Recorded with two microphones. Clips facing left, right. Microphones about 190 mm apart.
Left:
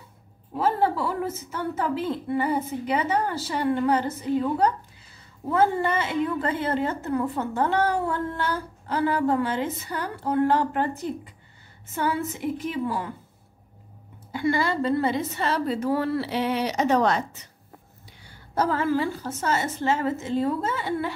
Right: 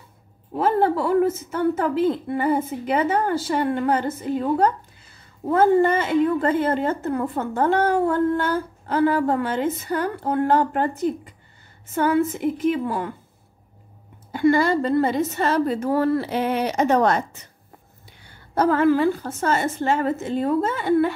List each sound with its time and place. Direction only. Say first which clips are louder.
0.6 s a woman's voice: right 4 dB; 55° right (ahead or behind)
11.9 s a woman's voice: right 7 dB; 50° right (ahead or behind)
14.3 s a woman's voice: right 6 dB; 50° right (ahead or behind)